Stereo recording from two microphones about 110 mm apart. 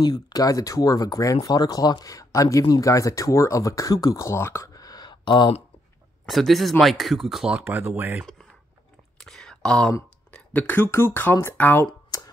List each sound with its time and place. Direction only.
0.0 s speech: 35° left (ahead or behind)
6.2 s speech: centre (ahead or behind); by 8.3 s 20° right (ahead or behind)
9.2 s a sound: 5° left (ahead or behind)
10.3 s speech: 15° left (ahead or behind)